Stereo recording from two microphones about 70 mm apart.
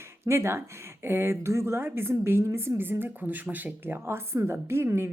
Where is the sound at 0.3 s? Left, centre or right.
Right.